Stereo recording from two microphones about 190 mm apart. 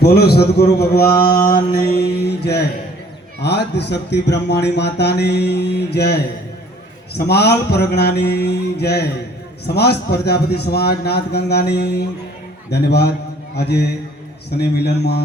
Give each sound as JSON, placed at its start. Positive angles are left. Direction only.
{"t": 0.0, "sound": "speech", "side_deg": 55}